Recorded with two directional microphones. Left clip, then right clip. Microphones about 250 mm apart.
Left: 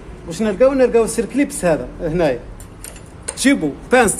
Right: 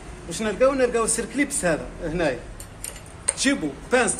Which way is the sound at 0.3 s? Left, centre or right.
Left.